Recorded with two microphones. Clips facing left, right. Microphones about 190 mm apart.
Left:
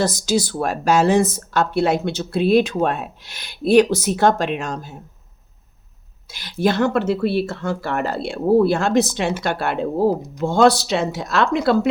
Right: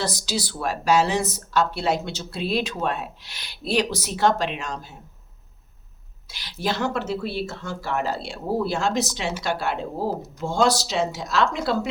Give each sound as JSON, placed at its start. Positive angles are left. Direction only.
{"t": 0.0, "sound": "speech", "side_deg": 50}
{"t": 6.3, "sound": "speech", "side_deg": 50}